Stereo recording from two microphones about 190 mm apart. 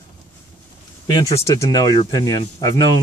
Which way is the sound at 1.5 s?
20° left (ahead or behind).